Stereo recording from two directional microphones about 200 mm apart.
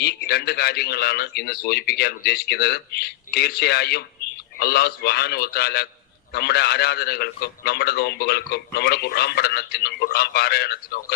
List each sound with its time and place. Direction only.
0.0 s a man's voice: 55° left (ahead or behind)